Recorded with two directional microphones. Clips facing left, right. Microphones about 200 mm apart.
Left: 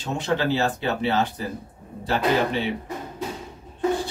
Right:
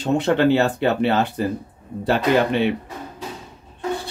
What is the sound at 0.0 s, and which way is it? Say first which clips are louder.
Speech: right 7 dB; 60° right (ahead or behind).